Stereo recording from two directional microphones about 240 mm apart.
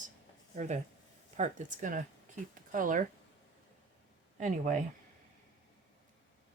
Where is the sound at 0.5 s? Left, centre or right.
Right.